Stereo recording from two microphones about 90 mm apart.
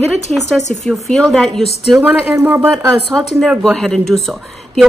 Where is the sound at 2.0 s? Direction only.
25° right (ahead or behind).